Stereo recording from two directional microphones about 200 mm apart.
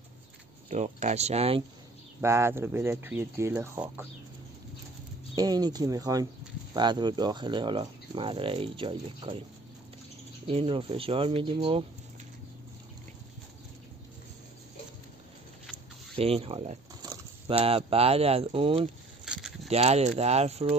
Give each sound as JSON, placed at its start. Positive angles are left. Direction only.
{"t": 0.7, "sound": "speech", "side_deg": -35}
{"t": 2.2, "sound": "speech", "side_deg": -15}
{"t": 5.3, "sound": "speech", "side_deg": -20}
{"t": 10.4, "sound": "speech", "side_deg": -30}
{"t": 16.2, "sound": "speech", "side_deg": -30}
{"t": 19.2, "sound": "scrape", "side_deg": 0}
{"t": 19.7, "sound": "speech", "side_deg": -30}